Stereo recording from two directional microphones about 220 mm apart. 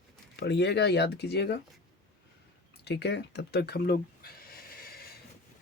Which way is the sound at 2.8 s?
50° left (ahead or behind).